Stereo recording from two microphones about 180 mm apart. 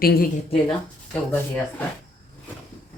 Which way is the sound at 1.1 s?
10° left (ahead or behind).